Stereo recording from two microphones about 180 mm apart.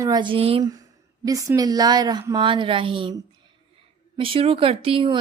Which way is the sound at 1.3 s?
20° right (ahead or behind).